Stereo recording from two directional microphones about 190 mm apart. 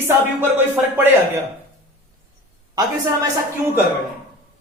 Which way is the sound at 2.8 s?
15° right (ahead or behind).